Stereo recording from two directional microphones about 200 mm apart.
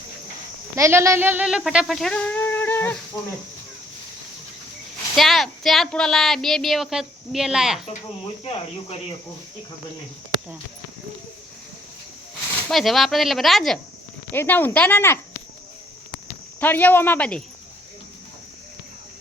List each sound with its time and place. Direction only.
0.8 s speech: 15° right (ahead or behind); by 3.0 s 10° left (ahead or behind)
5.1 s speech: centre (ahead or behind)
8.4 s speech: 30° left (ahead or behind)
12.6 s speech: centre (ahead or behind)
16.6 s speech: 10° left (ahead or behind)